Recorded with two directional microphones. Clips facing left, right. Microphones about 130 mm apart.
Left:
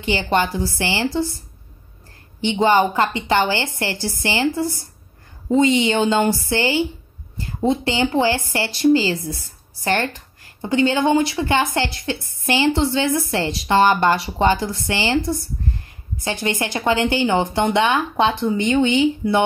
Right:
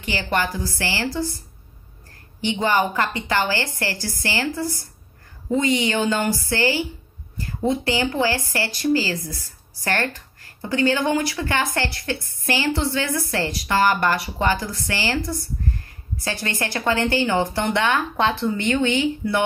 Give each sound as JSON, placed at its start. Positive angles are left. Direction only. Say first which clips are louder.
{"t": 0.0, "sound": "speech", "louder": "left 4 dB", "side_deg": 25}
{"t": 2.4, "sound": "speech", "louder": "left 4 dB", "side_deg": 20}